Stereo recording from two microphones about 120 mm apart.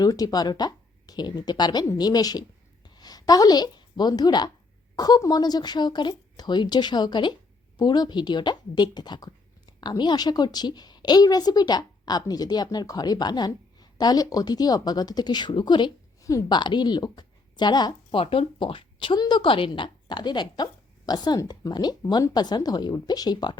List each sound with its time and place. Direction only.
0.0 s a woman's voice: 30° left (ahead or behind)